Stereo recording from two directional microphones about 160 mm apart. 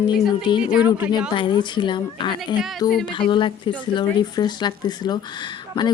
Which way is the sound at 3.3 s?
30° left (ahead or behind).